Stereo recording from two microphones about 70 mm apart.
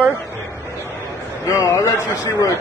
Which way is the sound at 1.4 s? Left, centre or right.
Left.